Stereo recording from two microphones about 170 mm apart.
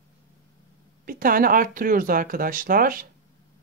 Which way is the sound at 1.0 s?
55° right (ahead or behind).